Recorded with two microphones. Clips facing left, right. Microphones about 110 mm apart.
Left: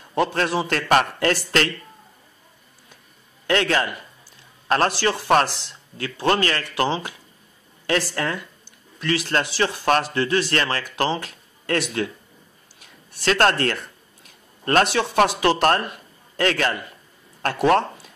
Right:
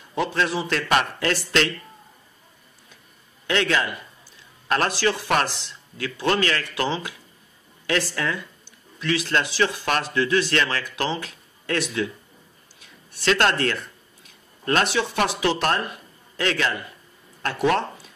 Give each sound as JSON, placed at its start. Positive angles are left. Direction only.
{"t": 0.2, "sound": "a man's voice", "side_deg": 45}
{"t": 3.4, "sound": "a man's voice", "side_deg": 40}